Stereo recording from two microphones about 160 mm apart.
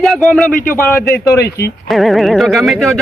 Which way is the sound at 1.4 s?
90° left.